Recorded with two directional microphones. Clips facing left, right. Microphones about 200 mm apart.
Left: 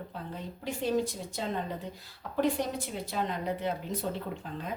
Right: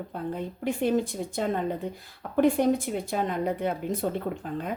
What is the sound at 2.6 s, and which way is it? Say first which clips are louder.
Speech: right 9 dB; 55° right (ahead or behind).